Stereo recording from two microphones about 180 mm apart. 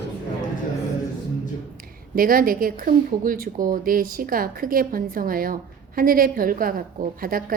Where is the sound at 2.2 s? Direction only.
50° right (ahead or behind).